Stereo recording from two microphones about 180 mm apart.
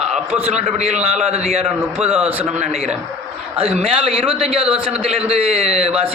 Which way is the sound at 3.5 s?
30° right (ahead or behind).